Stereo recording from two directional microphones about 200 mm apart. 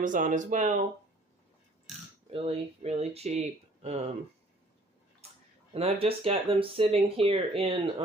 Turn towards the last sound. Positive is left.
turn(degrees=-25)  # may be behind; listen again after turning